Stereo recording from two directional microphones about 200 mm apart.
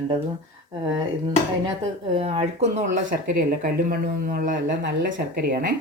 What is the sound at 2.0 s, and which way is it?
Speech, 30° right (ahead or behind).